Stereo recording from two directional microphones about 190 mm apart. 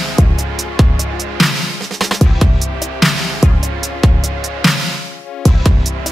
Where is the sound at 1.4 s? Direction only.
Centre (ahead or behind).